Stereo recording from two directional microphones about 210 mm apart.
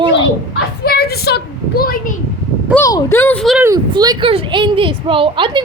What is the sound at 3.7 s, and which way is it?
Speech, 20° right (ahead or behind).